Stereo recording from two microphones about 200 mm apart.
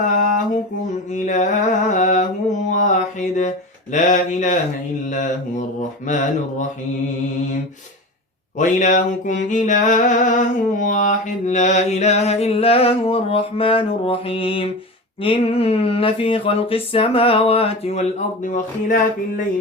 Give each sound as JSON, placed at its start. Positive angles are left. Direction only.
{"t": 0.0, "sound": "mantra", "side_deg": 40}
{"t": 3.9, "sound": "music", "side_deg": 40}
{"t": 5.0, "sound": "mantra", "side_deg": 40}
{"t": 6.1, "sound": "music", "side_deg": 40}
{"t": 8.5, "sound": "music", "side_deg": 40}
{"t": 15.2, "sound": "a sound", "side_deg": 30}
{"t": 18.4, "sound": "music", "side_deg": 40}